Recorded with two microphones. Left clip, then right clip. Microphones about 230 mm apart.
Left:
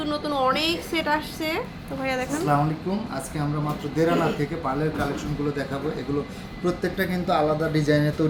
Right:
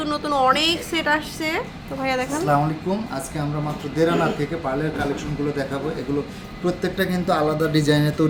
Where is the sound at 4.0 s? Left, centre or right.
Centre.